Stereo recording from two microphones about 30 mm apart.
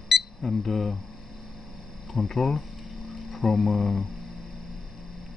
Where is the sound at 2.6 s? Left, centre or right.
Centre.